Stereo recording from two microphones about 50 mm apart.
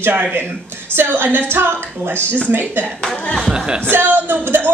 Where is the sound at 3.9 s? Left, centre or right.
Right.